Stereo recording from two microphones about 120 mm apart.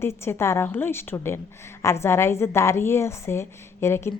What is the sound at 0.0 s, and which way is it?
Speech, 20° left (ahead or behind).